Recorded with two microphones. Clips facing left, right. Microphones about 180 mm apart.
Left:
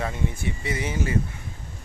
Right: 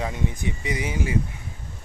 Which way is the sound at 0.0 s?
15° right (ahead or behind).